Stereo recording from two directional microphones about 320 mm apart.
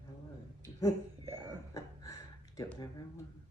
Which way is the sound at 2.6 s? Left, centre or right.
Centre.